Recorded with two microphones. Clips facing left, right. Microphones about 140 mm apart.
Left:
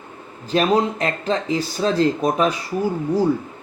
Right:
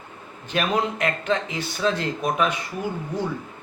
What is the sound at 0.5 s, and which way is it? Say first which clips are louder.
Speech: left 6 dB; 35° left (ahead or behind).